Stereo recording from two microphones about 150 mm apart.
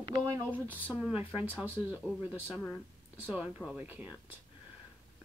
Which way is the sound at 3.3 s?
5° right (ahead or behind).